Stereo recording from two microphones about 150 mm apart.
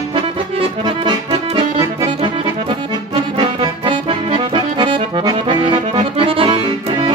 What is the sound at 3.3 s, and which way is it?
Accordion, 35° right (ahead or behind).